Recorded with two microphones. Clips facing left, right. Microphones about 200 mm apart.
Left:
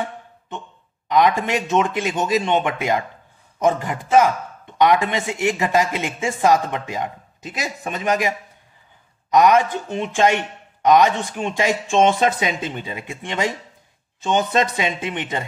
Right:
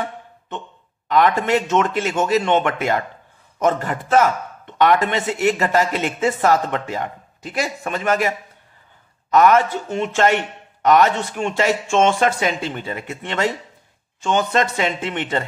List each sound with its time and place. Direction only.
1.0 s speech: 15° left (ahead or behind)